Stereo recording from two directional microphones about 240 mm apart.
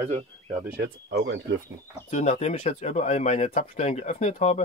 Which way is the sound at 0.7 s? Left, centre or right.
Right.